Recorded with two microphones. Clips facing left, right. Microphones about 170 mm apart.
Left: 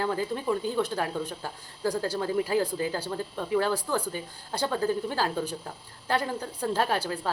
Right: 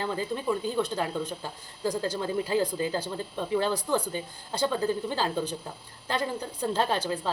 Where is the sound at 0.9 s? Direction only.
15° right (ahead or behind).